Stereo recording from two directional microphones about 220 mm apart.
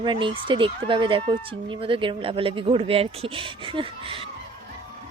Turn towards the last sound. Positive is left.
turn(degrees=-25)  # may be behind; listen again after turning